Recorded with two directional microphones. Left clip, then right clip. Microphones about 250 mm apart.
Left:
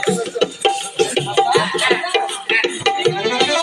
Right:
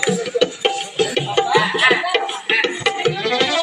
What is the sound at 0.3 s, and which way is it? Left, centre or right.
Music, left.